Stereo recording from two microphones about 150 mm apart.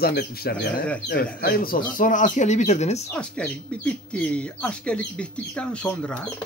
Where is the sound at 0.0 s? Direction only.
90° left; by 3.0 s 50° left (ahead or behind).